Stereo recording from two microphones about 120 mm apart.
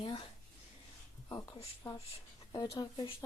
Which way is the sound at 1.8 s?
20° left (ahead or behind).